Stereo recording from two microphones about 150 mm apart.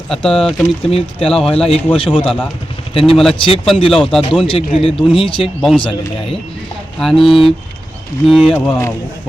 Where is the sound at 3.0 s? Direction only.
Centre (ahead or behind).